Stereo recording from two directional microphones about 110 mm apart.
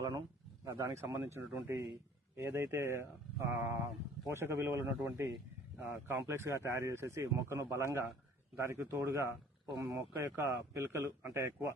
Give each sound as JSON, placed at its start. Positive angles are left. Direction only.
{"t": 0.6, "sound": "speech", "side_deg": -25}